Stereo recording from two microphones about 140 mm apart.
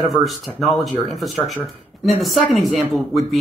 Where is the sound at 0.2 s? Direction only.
Centre (ahead or behind).